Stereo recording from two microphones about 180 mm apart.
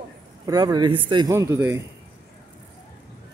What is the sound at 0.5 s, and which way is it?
Speech, 20° right (ahead or behind).